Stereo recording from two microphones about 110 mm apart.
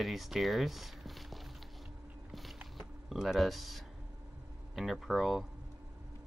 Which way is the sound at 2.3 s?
Centre (ahead or behind).